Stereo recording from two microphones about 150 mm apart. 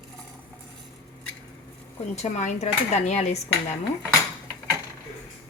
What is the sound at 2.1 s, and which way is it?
Speech, 50° left (ahead or behind).